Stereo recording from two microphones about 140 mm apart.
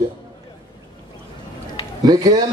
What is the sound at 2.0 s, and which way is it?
Speech, 30° right (ahead or behind).